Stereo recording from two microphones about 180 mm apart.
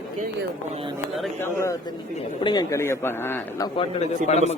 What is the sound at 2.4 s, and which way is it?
A man's voice, 25° left (ahead or behind).